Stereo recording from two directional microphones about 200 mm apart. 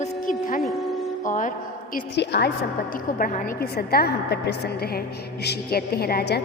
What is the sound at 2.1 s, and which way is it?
Speech, 55° left (ahead or behind).